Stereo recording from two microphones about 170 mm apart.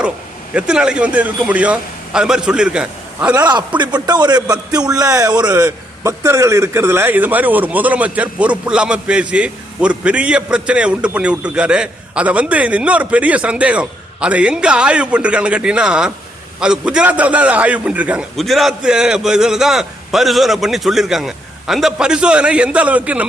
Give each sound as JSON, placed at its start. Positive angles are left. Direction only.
{"t": 0.5, "sound": "a man's voice", "side_deg": -5}
{"t": 3.8, "sound": "a man's voice", "side_deg": -25}
{"t": 5.5, "sound": "a man's voice", "side_deg": -10}